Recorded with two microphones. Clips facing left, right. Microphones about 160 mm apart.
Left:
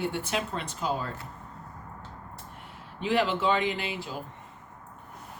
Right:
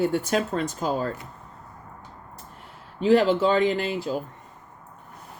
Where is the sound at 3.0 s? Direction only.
40° right (ahead or behind).